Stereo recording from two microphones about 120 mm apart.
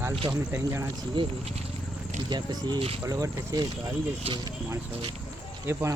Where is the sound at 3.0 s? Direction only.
25° right (ahead or behind).